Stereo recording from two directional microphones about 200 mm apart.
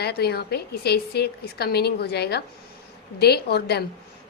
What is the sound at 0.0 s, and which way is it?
A woman's voice, 55° left (ahead or behind).